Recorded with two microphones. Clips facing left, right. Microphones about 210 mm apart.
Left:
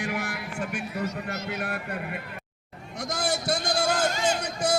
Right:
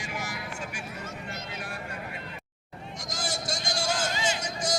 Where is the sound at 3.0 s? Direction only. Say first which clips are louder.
Left 7 dB; 60° left (ahead or behind).